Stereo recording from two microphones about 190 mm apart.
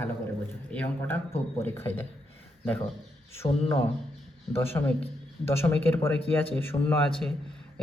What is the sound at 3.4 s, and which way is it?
Speech, 25° left (ahead or behind).